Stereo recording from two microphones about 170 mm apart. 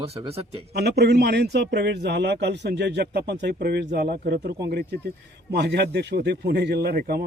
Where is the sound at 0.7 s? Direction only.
70° right (ahead or behind).